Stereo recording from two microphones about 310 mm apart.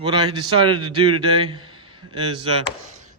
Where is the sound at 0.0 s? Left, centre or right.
Centre.